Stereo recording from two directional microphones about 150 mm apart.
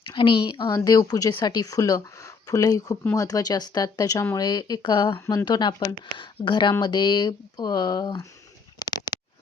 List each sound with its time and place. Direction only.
0.1 s speech: 35° left (ahead or behind)
5.1 s speech: 15° left (ahead or behind)
5.5 s speech: 30° left (ahead or behind)
8.8 s a sound: 25° left (ahead or behind)